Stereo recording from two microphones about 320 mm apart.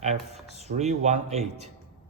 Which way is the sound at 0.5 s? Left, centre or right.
Centre.